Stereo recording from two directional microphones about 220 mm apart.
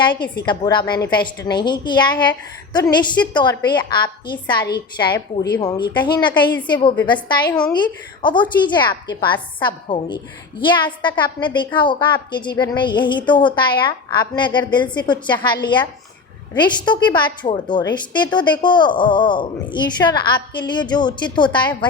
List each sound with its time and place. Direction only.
0.0 s a woman's voice: 20° left (ahead or behind)
0.9 s a woman's voice: 45° left (ahead or behind)
1.5 s a woman's voice: 20° left (ahead or behind)